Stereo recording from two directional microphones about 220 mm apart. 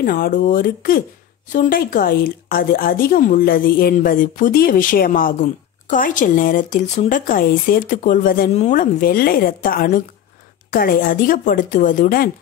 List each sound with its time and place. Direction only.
0.0 s a woman's voice: 40° left (ahead or behind)